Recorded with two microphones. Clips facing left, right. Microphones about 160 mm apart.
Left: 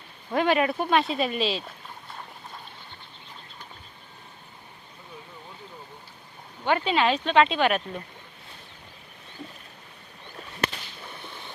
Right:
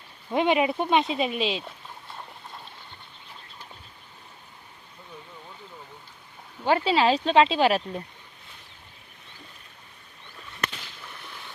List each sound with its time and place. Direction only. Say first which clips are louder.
0.3 s speech: even; 20° right (ahead or behind)
6.7 s speech: right 2 dB; 30° right (ahead or behind)
10.3 s a sound: left 4 dB; 30° left (ahead or behind)